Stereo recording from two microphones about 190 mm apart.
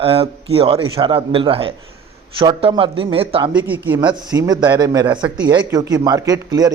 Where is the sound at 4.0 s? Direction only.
20° right (ahead or behind).